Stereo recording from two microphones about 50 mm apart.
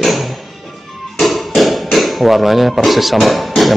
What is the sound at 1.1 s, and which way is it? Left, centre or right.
Hammer, centre.